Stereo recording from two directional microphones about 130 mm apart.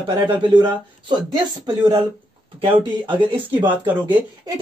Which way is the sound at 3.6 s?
15° right (ahead or behind).